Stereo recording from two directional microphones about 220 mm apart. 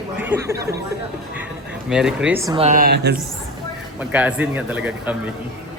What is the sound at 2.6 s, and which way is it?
Speech, 35° right (ahead or behind).